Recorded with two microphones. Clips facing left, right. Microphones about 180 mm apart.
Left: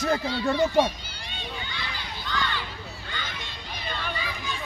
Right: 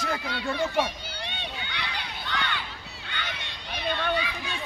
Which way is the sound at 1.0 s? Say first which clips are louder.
Right 2 dB; 65° right (ahead or behind).